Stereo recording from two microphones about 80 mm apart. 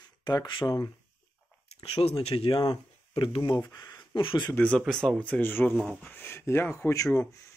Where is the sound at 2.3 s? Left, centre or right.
Left.